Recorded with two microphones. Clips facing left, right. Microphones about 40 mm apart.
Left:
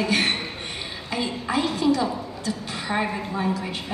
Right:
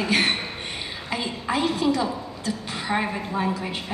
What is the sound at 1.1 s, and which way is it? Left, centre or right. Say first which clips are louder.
Speech: left 1 dB; centre.